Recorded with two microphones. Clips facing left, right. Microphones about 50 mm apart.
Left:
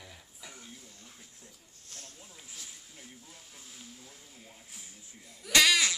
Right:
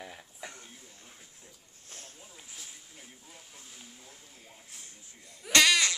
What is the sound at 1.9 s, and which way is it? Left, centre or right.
Snake, right.